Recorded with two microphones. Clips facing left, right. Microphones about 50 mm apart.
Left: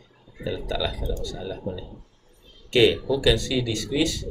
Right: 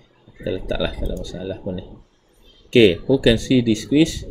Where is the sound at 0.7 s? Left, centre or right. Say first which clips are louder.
Right 4 dB; right.